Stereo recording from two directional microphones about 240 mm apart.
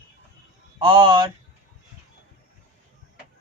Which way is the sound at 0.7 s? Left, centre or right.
Centre.